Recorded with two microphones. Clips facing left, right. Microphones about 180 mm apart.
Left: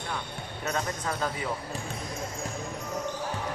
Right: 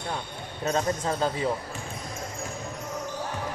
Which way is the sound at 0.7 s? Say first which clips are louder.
Right 5 dB; 30° right (ahead or behind).